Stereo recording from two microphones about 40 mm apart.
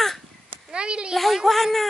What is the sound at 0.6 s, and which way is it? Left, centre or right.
Speech, right.